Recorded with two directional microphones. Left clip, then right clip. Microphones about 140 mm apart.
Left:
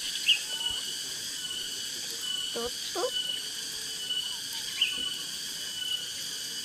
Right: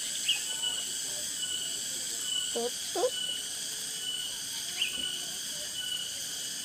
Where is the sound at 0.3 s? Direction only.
90° right.